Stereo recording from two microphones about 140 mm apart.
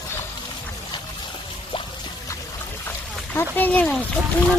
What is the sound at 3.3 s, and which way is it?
Speech, 15° left (ahead or behind).